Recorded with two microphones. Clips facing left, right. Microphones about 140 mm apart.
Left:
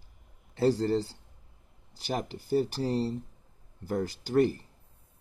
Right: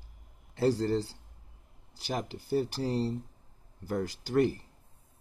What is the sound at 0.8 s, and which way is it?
Speech, 10° left (ahead or behind).